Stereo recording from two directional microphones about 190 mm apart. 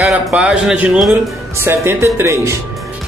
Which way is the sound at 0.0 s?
Centre (ahead or behind).